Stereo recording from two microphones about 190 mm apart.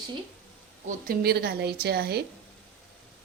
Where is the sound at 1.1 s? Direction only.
55° right (ahead or behind).